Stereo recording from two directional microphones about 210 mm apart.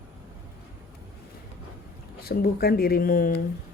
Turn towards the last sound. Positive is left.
turn(degrees=45)  # may be behind; listen again after turning